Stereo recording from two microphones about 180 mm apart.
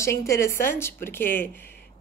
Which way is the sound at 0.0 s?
15° left (ahead or behind).